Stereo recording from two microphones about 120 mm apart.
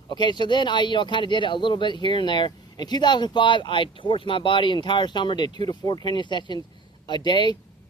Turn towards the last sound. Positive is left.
turn(degrees=40)  # may be behind; listen again after turning